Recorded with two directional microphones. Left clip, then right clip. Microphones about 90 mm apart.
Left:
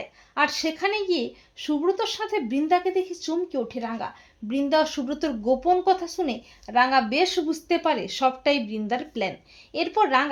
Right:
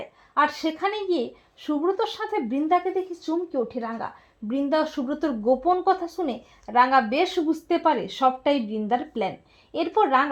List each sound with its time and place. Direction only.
0.3 s a woman's voice: 30° right (ahead or behind)